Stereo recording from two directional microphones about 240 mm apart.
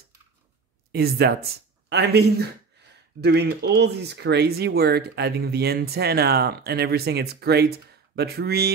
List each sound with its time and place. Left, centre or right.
0.9 s speech: right